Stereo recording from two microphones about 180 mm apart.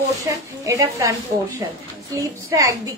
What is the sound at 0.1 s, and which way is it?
A woman's voice, 20° right (ahead or behind).